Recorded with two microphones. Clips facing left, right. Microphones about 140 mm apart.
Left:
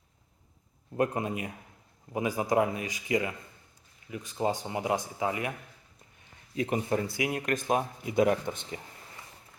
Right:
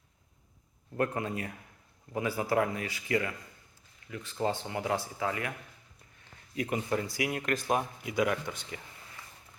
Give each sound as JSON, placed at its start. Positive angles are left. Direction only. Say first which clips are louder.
{"t": 0.9, "sound": "speech", "louder": "left 2 dB", "side_deg": 20}
{"t": 6.6, "sound": "speech", "louder": "left 3 dB", "side_deg": 30}